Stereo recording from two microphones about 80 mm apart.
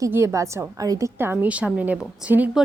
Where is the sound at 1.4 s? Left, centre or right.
Centre.